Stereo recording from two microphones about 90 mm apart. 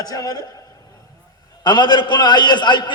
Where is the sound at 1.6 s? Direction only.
55° left (ahead or behind).